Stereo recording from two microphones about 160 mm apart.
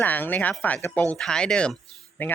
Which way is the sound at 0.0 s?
10° left (ahead or behind).